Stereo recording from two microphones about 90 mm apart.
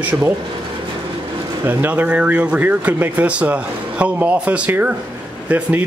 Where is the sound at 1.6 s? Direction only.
20° right (ahead or behind).